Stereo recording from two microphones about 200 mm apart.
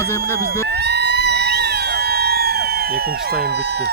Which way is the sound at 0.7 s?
55° right (ahead or behind).